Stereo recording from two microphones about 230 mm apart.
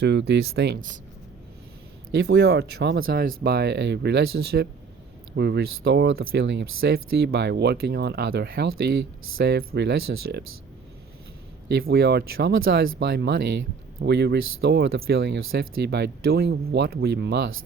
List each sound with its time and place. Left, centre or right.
0.0 s speech: right
2.1 s speech: right
11.7 s speech: right